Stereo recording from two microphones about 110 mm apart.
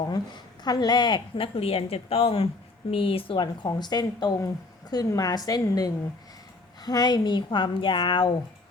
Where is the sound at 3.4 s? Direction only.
40° left (ahead or behind).